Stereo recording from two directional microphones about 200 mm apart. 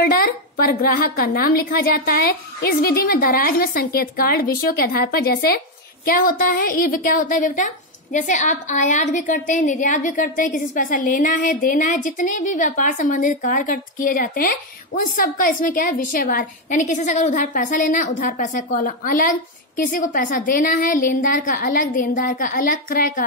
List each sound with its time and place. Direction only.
0.0 s a woman's voice: 45° left (ahead or behind)